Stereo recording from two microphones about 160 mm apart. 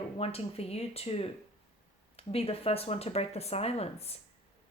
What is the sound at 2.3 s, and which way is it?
Speech, 40° left (ahead or behind).